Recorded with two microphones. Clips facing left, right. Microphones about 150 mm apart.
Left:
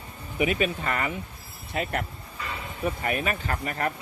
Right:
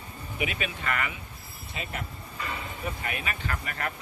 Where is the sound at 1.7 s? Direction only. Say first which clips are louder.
Left 8 dB; 65° left (ahead or behind).